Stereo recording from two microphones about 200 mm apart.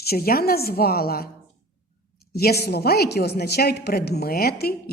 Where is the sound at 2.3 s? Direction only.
50° left (ahead or behind).